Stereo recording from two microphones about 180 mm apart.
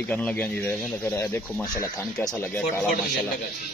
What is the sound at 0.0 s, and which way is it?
A man's voice, 5° left (ahead or behind).